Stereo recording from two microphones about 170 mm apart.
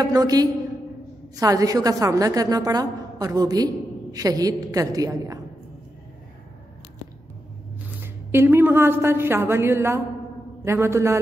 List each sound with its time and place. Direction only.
0.0 s a woman's voice: 20° right (ahead or behind)
8.0 s a woman's voice: 15° right (ahead or behind)